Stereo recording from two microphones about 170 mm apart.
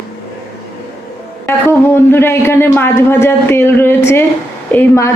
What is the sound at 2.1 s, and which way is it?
A man's voice, 15° left (ahead or behind).